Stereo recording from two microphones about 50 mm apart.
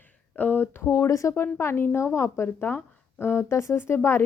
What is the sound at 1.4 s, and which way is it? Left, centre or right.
Speech, left.